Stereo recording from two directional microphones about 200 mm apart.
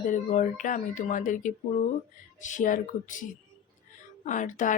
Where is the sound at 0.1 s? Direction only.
40° left (ahead or behind).